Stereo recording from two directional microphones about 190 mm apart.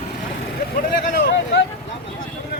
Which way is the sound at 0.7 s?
50° left (ahead or behind).